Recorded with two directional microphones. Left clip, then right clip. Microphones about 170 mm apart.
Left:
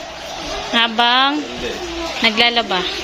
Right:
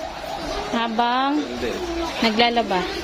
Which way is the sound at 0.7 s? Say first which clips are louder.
Left 7 dB; centre (ahead or behind).